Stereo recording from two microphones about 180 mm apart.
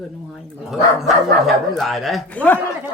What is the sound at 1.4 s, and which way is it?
Speech, centre (ahead or behind).